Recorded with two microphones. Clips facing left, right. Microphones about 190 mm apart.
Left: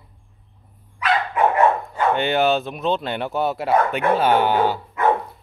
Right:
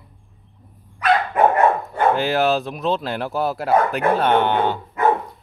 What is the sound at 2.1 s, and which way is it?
Speech, centre (ahead or behind).